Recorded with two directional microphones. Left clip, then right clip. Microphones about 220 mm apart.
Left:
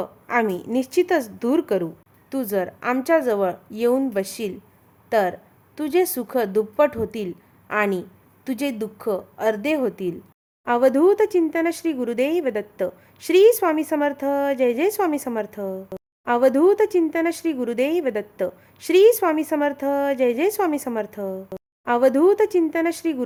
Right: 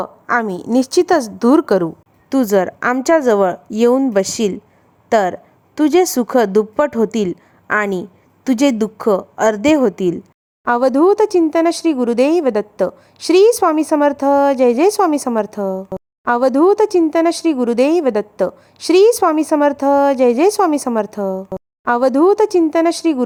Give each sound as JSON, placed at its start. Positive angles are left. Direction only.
{"t": 0.0, "sound": "a woman's voice", "side_deg": -20}